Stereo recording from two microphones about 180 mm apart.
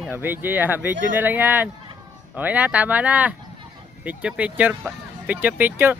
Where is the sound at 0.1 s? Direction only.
10° right (ahead or behind).